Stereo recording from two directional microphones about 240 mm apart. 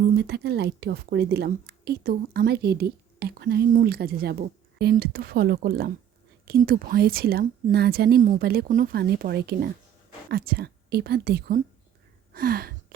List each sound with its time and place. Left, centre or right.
0.2 s a woman's voice: right